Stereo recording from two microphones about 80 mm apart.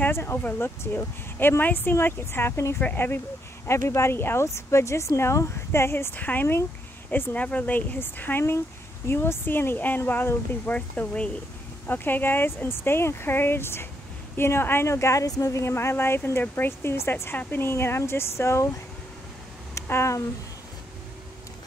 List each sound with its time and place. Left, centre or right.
0.0 s speech: left
2.8 s speech: left
3.6 s speech: left
6.1 s speech: left
19.7 s a sound: left